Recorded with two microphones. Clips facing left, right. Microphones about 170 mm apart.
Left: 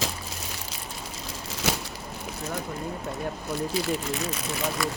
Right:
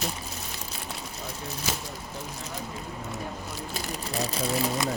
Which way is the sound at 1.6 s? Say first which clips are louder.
Left 6 dB; 75° left (ahead or behind).